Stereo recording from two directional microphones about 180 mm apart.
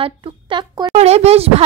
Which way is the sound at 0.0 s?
25° right (ahead or behind).